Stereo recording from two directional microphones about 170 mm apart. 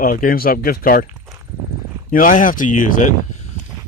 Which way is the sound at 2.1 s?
55° left (ahead or behind).